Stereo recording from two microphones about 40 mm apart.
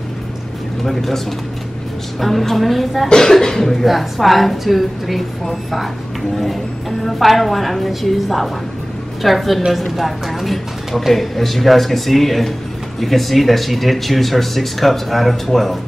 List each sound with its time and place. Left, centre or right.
0.8 s a woman's voice: centre
3.1 s speech: centre
3.8 s a woman's voice: centre